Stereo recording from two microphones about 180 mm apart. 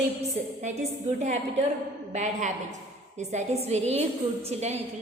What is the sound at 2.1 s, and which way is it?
Speech, 40° right (ahead or behind).